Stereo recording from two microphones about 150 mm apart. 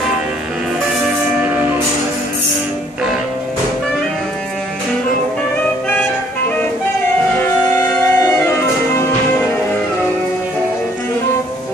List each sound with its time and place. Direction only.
7.3 s music: 15° left (ahead or behind)